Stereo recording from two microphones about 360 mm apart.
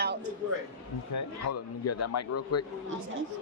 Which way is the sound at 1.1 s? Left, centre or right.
Left.